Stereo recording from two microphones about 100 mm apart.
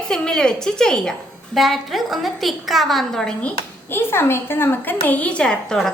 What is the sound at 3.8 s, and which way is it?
A woman's voice, 25° left (ahead or behind).